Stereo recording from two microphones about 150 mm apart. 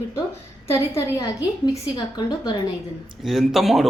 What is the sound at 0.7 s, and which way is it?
A woman's voice, 20° left (ahead or behind).